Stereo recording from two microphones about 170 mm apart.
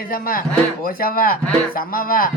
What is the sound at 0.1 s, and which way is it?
Speech, 55° left (ahead or behind).